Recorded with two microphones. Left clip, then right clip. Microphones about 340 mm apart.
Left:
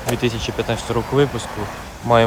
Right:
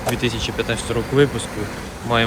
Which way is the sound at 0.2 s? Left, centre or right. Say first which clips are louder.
Even; centre.